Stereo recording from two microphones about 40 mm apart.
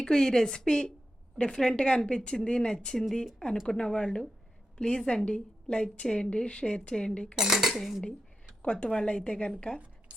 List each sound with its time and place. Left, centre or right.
0.0 s a woman's voice: centre
3.9 s a woman's voice: left
7.1 s cutlery: left
7.3 s cutlery: centre
8.6 s cutlery: left
8.9 s a woman's voice: left